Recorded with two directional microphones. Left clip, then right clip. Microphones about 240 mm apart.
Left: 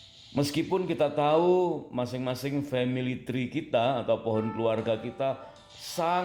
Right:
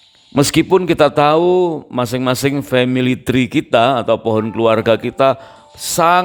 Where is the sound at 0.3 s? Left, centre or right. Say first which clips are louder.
Right 15 dB; right.